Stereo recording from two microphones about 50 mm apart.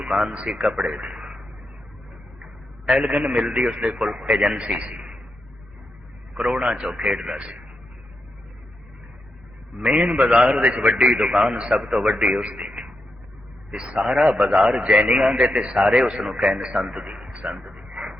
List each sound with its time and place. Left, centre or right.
0.0 s a man's voice: centre
2.4 s a sound: centre
3.5 s a man's voice: centre
4.8 s a sound: right
6.3 s a man's voice: centre
9.7 s a man's voice: right